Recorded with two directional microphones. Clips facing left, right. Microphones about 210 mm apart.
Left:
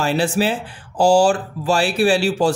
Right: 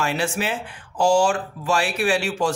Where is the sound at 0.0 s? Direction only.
35° left (ahead or behind).